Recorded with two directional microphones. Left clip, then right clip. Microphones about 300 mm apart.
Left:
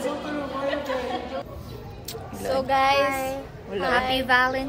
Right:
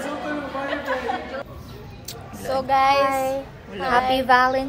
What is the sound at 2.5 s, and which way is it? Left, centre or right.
Child singing, centre.